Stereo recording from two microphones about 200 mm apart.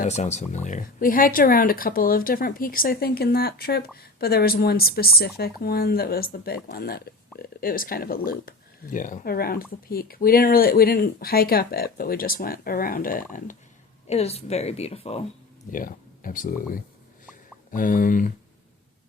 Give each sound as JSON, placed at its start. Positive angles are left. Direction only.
{"t": 0.0, "sound": "speech", "side_deg": 35}
{"t": 14.1, "sound": "a woman's voice", "side_deg": 30}
{"t": 15.7, "sound": "speech", "side_deg": 45}